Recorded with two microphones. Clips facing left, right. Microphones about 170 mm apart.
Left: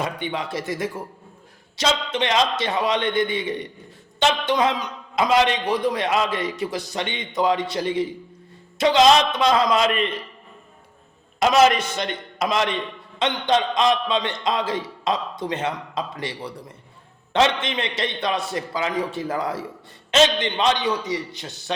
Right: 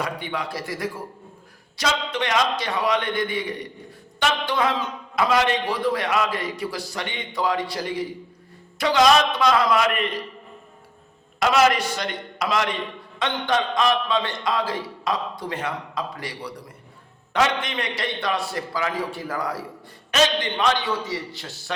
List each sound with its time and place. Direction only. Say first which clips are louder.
0.0 s a man's voice: left 2 dB; 20° left (ahead or behind)
11.3 s a man's voice: left 2 dB; 20° left (ahead or behind)